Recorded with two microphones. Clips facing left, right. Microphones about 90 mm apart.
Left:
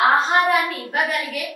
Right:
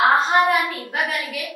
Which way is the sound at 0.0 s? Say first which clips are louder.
Even; centre (ahead or behind).